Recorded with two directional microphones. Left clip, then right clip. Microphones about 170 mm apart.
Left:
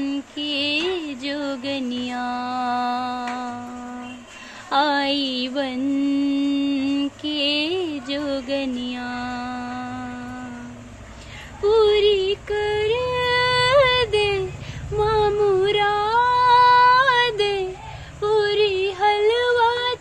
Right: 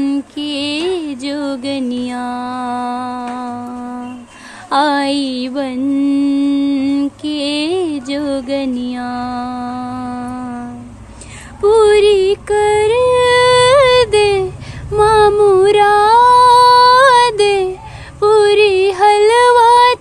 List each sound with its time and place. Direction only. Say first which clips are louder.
0.0 s music: right 8 dB; 20° right (ahead or behind)
4.6 s mantra: right 6 dB; 20° right (ahead or behind)
11.6 s music: right 7 dB; 30° right (ahead or behind)
15.0 s female singing: right 10 dB; 30° right (ahead or behind)
18.2 s music: right 10 dB; 40° right (ahead or behind)